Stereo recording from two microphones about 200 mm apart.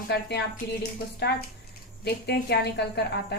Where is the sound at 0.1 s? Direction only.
55° left (ahead or behind).